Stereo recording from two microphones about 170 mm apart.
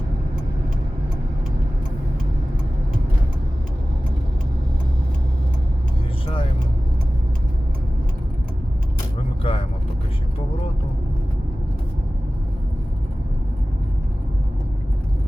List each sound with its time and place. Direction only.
9.4 s vehicle: 35° left (ahead or behind)